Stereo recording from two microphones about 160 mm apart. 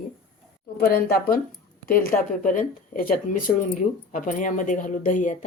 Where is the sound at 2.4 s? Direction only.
55° left (ahead or behind).